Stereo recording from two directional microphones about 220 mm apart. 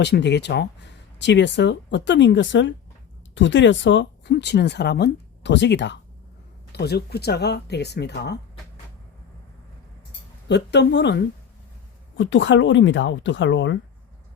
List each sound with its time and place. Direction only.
0.0 s speech: 50° left (ahead or behind)
10.5 s speech: 50° left (ahead or behind)